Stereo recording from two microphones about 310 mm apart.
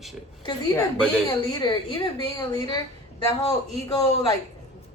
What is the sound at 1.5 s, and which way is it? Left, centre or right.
A woman's voice, centre.